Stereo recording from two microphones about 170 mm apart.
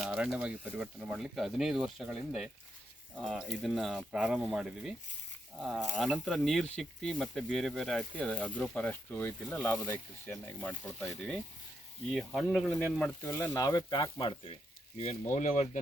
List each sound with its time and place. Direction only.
0.0 s speech: 5° right (ahead or behind)
13.2 s speech: 15° left (ahead or behind); by 15.8 s 45° left (ahead or behind)